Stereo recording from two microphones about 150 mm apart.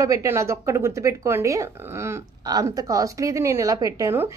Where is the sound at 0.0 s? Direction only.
20° right (ahead or behind).